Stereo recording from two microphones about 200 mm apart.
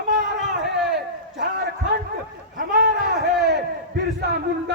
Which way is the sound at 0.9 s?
60° right (ahead or behind).